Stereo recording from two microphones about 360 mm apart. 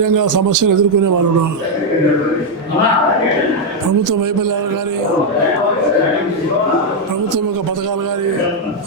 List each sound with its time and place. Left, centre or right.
0.0 s a man's voice: right